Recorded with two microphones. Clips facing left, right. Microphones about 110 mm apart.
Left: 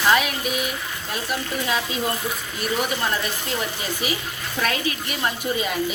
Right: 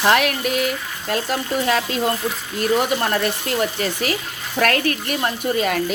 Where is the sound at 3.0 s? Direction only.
60° right (ahead or behind).